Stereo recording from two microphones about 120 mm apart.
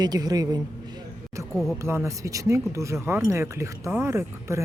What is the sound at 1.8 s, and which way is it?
A woman's voice, 25° right (ahead or behind).